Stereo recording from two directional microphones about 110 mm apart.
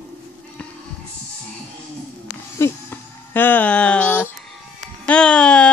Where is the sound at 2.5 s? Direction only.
25° left (ahead or behind).